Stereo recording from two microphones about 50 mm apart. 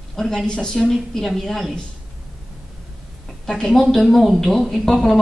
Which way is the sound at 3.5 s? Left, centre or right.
Centre.